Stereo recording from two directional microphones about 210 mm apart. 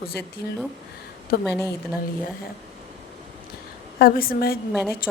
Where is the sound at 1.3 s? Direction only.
45° left (ahead or behind).